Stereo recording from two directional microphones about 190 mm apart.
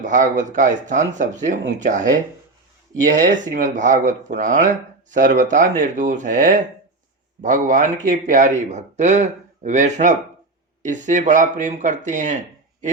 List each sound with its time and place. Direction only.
0.0 s speech: 40° right (ahead or behind)
3.2 s speech: 40° right (ahead or behind)